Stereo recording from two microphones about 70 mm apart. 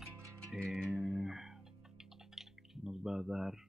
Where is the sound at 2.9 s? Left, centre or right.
Centre.